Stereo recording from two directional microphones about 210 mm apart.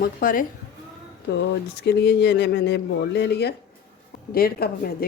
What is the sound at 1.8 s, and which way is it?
Speech, 50° left (ahead or behind).